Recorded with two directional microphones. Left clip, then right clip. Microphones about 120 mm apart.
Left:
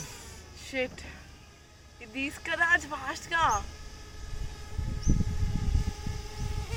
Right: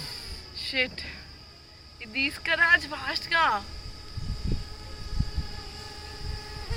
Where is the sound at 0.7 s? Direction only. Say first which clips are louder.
Right 5 dB; 40° left (ahead or behind).